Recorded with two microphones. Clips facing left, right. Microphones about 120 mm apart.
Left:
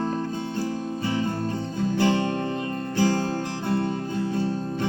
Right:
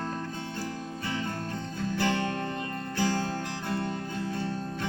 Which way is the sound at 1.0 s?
30° left (ahead or behind).